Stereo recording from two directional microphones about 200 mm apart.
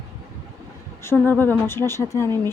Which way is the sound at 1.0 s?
10° left (ahead or behind).